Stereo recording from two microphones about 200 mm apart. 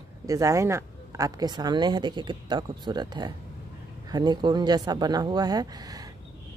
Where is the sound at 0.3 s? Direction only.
15° right (ahead or behind).